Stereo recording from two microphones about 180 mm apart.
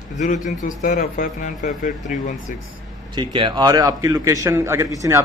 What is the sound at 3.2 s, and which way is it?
A man's voice, 30° right (ahead or behind).